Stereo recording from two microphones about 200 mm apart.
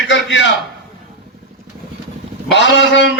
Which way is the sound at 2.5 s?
60° left (ahead or behind).